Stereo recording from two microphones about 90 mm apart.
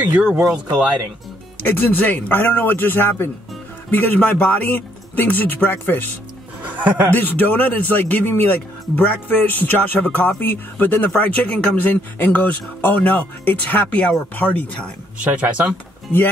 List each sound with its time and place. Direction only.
0.0 s speech: 10° right (ahead or behind)
1.6 s speech: 25° left (ahead or behind)
6.6 s speech: 20° right (ahead or behind)
7.2 s speech: 20° left (ahead or behind)
15.2 s speech: 15° right (ahead or behind)